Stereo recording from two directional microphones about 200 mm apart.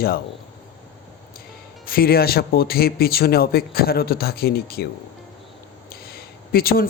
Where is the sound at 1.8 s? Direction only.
50° left (ahead or behind).